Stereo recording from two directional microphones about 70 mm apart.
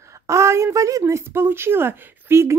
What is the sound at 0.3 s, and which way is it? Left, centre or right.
Speech, right.